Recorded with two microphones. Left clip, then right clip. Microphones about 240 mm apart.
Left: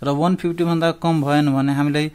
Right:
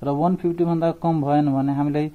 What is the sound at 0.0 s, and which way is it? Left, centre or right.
A man's voice, centre.